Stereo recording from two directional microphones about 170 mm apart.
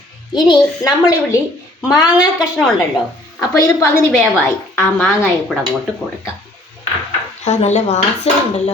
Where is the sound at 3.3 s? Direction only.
15° left (ahead or behind).